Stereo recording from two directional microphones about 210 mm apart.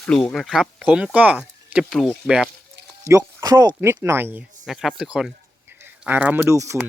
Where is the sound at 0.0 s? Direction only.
5° left (ahead or behind).